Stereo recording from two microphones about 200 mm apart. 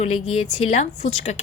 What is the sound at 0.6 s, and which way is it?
Speech, 35° left (ahead or behind).